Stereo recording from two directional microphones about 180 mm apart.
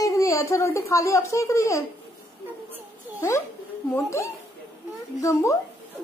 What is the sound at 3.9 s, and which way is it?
A woman's voice, 15° left (ahead or behind).